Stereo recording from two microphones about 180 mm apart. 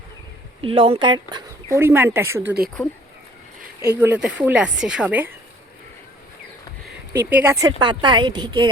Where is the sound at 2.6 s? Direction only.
55° right (ahead or behind).